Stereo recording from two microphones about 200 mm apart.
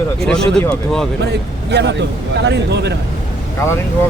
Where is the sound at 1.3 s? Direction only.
60° right (ahead or behind).